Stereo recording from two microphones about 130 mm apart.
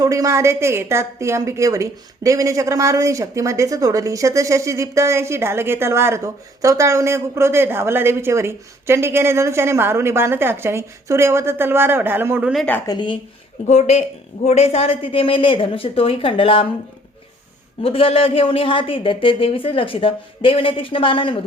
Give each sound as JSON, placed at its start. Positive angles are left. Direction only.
{"t": 0.0, "sound": "a woman's voice", "side_deg": -25}
{"t": 12.9, "sound": "speech", "side_deg": 35}
{"t": 13.7, "sound": "speech", "side_deg": 60}
{"t": 17.8, "sound": "speech", "side_deg": 45}